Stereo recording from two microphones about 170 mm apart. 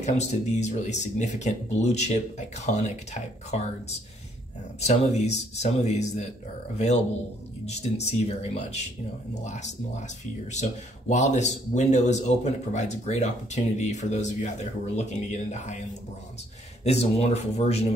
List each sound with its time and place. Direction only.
0.0 s speech: 45° left (ahead or behind)
4.7 s speech: 40° left (ahead or behind)
16.8 s speech: 40° left (ahead or behind)